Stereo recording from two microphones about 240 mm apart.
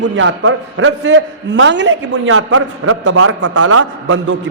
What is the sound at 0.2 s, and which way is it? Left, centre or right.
A man's voice, right.